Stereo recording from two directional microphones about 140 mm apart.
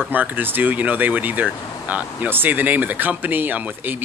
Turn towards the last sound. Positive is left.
turn(degrees=-10)  # may be behind; listen again after turning